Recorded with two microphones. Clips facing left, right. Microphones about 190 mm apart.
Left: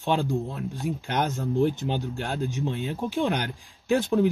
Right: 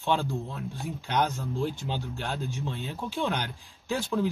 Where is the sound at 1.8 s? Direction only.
15° left (ahead or behind).